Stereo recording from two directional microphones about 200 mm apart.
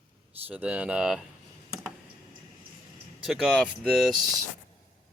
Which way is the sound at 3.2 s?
Centre (ahead or behind).